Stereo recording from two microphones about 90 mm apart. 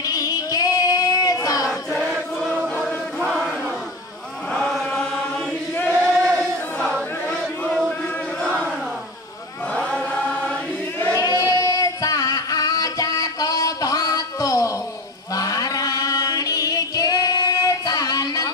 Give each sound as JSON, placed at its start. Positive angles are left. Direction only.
{"t": 0.0, "sound": "child singing", "side_deg": 40}
{"t": 1.7, "sound": "child singing", "side_deg": -5}
{"t": 2.8, "sound": "chant", "side_deg": 0}
{"t": 6.8, "sound": "a sound", "side_deg": 5}
{"t": 8.4, "sound": "chant", "side_deg": 10}
{"t": 9.8, "sound": "choir", "side_deg": 10}
{"t": 11.1, "sound": "singing", "side_deg": 40}
{"t": 15.3, "sound": "chant", "side_deg": 40}